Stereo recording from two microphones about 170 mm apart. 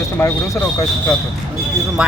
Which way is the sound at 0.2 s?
15° left (ahead or behind).